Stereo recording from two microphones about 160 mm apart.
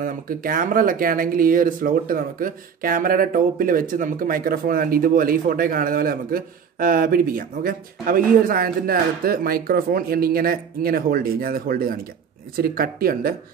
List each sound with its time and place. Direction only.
0.0 s speech: 60° right (ahead or behind)